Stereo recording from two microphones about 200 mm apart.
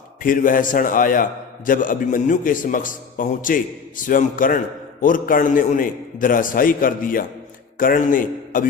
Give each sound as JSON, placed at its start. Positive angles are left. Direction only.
{"t": 0.2, "sound": "a man's voice", "side_deg": 45}